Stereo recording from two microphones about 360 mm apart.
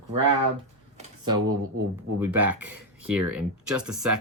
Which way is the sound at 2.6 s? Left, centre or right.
Right.